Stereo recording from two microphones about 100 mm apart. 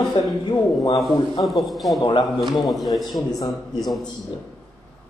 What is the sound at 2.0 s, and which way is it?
Speech, 50° left (ahead or behind).